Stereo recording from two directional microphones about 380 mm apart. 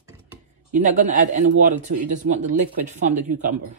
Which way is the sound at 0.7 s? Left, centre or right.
Centre.